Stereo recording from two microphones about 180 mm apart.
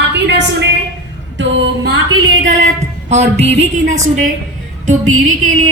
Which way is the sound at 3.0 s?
40° right (ahead or behind).